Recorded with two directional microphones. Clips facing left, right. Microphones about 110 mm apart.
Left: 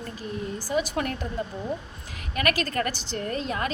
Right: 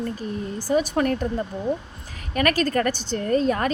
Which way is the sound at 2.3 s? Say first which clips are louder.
Right 5 dB; 40° right (ahead or behind).